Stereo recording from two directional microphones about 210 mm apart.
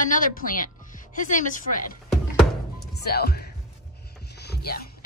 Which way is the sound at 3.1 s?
50° left (ahead or behind).